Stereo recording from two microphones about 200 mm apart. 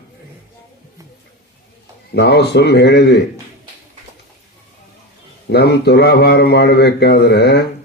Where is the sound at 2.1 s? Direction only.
55° left (ahead or behind).